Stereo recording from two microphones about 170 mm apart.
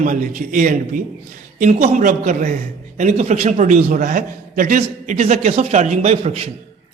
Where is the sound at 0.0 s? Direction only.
50° right (ahead or behind).